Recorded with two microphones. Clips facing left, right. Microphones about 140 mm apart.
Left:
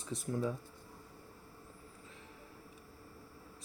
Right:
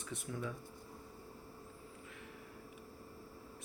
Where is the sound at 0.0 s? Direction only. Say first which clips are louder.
Left 6 dB; 35° left (ahead or behind).